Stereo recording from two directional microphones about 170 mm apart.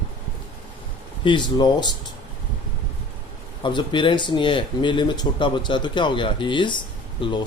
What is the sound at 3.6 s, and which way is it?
Speech, 25° left (ahead or behind).